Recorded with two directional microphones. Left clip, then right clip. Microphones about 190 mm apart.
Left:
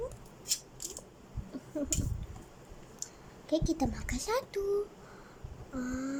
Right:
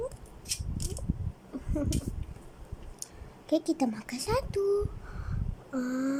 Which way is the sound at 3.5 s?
10° right (ahead or behind).